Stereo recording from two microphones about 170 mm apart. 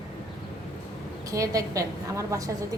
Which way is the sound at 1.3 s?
20° right (ahead or behind).